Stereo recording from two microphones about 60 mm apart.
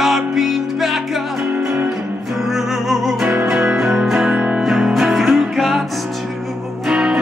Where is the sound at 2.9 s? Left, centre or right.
Centre.